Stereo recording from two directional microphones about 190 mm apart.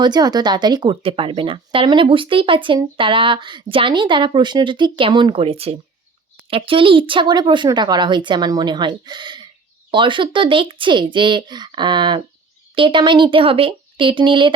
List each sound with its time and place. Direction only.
0.0 s speech: 20° right (ahead or behind)